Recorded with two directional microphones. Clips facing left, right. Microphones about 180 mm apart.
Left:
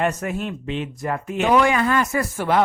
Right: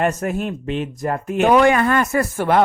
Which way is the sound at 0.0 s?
45° right (ahead or behind).